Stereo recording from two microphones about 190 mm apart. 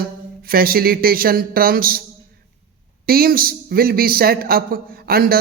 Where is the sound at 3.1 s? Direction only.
50° right (ahead or behind).